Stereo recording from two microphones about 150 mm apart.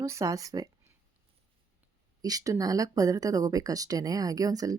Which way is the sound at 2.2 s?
20° right (ahead or behind).